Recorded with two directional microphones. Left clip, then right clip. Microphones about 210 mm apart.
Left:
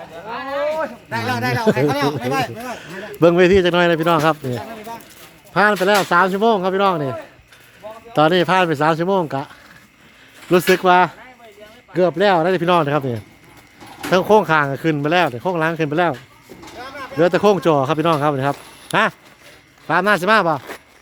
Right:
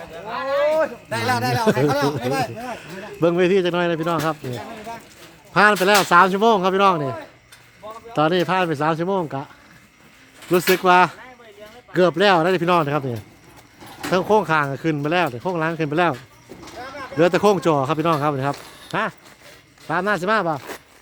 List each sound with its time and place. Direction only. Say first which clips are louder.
0.8 s speech: right 2 dB; 30° right (ahead or behind)
1.7 s speech: left 1 dB; 15° right (ahead or behind); by 2.5 s centre (ahead or behind)
2.6 s a man's voice: left 2 dB; 20° left (ahead or behind)
5.5 s a man's voice: even; 10° left (ahead or behind)
10.5 s a man's voice: left 2 dB; 20° left (ahead or behind)
16.8 s a sound: left 2 dB; 55° left (ahead or behind)
17.2 s a man's voice: left 2 dB; 10° left (ahead or behind); by 20.6 s 25° left (ahead or behind)